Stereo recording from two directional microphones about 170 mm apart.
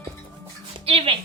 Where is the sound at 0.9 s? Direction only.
35° right (ahead or behind).